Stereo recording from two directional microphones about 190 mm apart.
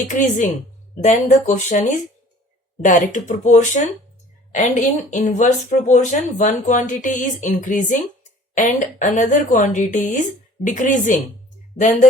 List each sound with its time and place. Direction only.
0.1 s speech: 40° left (ahead or behind)